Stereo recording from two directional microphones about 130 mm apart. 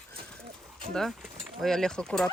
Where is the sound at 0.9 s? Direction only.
5° left (ahead or behind).